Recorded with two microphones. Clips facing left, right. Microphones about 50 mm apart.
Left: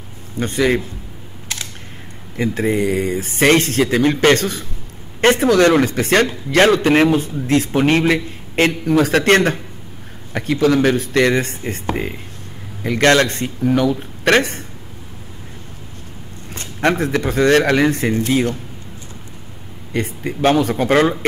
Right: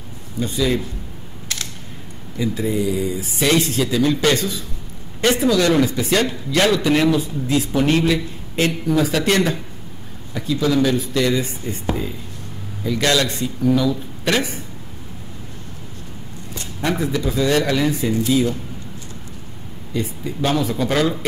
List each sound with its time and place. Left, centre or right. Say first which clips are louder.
0.4 s a man's voice: left 4 dB; left
2.3 s a man's voice: left 3 dB; left
16.5 s a man's voice: left 5 dB; left
19.9 s a man's voice: left 3 dB; left